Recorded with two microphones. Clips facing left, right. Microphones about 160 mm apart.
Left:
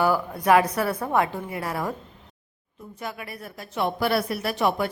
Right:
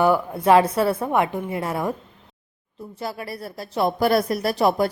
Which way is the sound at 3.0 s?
35° right (ahead or behind).